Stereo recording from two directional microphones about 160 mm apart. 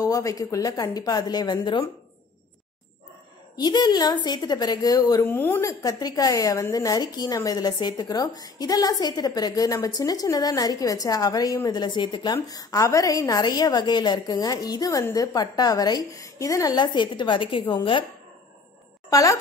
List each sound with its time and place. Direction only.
0.0 s a woman's voice: 20° left (ahead or behind)
3.5 s a woman's voice: 25° left (ahead or behind)
5.2 s a woman's voice: 15° left (ahead or behind); by 18.0 s 30° left (ahead or behind)
19.0 s speech: 20° left (ahead or behind)